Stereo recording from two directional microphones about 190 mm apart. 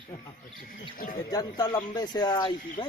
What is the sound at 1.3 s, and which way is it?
Speech, 20° left (ahead or behind).